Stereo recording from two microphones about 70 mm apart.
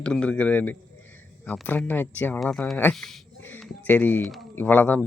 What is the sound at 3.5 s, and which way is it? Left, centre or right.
Speech, left.